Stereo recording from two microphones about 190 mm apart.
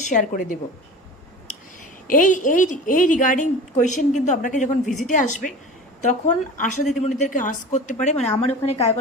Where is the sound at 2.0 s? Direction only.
45° left (ahead or behind).